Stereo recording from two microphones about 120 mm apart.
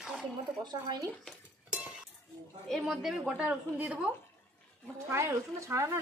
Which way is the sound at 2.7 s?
Centre (ahead or behind).